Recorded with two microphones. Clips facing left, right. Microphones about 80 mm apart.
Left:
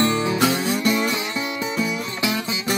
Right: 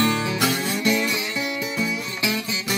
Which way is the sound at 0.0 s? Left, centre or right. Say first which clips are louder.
Left 2 dB; left.